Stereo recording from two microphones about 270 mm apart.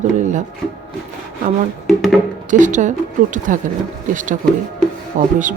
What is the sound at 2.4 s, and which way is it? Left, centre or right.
Speech, right.